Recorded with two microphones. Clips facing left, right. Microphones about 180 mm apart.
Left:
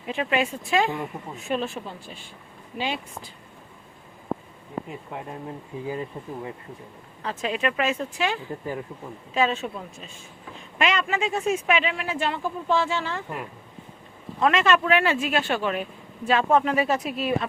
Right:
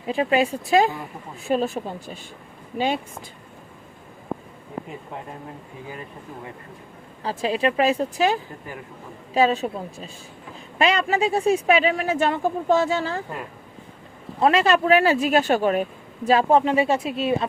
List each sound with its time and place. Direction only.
0.1 s speech: 35° right (ahead or behind)
7.2 s speech: 35° right (ahead or behind)
14.3 s speech: 35° right (ahead or behind)